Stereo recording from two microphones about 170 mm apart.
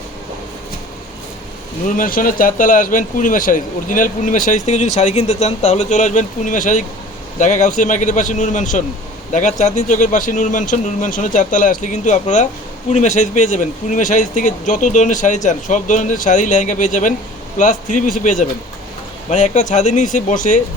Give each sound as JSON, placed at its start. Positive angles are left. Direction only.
{"t": 1.9, "sound": "speech", "side_deg": 55}